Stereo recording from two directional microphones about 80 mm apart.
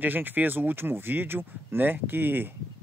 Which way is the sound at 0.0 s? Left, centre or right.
Right.